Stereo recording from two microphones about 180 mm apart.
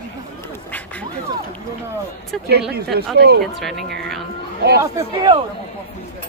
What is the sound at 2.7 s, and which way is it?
Speech, 65° right (ahead or behind).